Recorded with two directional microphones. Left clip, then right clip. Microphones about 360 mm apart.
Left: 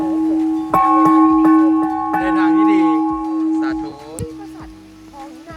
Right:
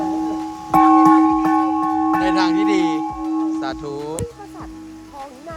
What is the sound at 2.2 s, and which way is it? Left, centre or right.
Music, centre.